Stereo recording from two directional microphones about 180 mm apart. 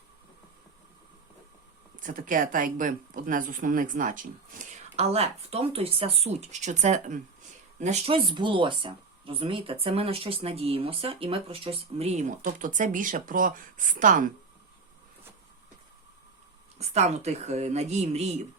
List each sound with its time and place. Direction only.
2.0 s speech: 50° right (ahead or behind)
16.7 s speech: 35° right (ahead or behind)